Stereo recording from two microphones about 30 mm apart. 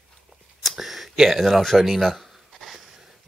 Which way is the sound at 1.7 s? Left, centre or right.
Centre.